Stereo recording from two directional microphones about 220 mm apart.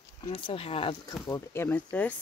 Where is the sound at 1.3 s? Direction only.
10° left (ahead or behind).